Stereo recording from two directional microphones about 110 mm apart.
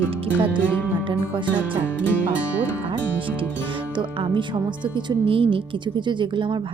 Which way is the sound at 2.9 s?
50° right (ahead or behind).